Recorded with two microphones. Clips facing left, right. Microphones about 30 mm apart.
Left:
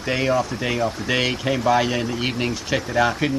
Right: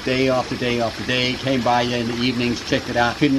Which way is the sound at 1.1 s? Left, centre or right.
Centre.